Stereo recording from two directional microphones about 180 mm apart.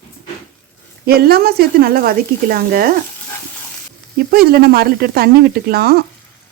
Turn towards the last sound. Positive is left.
turn(degrees=-60)  # may be behind; listen again after turning